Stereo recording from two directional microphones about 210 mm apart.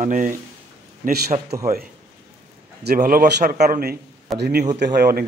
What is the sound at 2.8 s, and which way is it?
A man's voice, 40° right (ahead or behind).